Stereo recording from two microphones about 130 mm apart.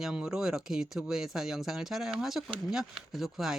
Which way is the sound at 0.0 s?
5° right (ahead or behind).